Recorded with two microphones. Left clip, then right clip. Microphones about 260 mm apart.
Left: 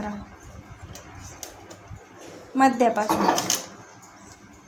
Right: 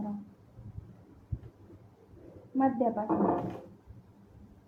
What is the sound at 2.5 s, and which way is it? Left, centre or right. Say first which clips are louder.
Speech: left 10 dB; left.